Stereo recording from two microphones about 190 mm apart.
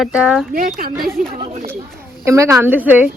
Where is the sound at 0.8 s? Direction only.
50° right (ahead or behind).